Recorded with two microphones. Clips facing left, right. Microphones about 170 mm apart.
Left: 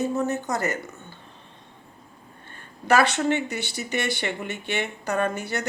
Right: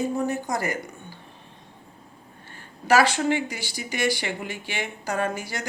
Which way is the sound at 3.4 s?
65° left (ahead or behind).